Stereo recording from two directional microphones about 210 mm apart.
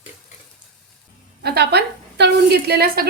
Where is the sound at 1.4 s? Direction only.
50° right (ahead or behind).